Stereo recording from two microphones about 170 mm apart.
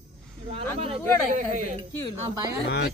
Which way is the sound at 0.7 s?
35° right (ahead or behind).